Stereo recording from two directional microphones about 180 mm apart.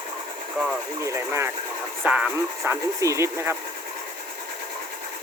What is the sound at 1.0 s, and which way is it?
Speech, 15° right (ahead or behind).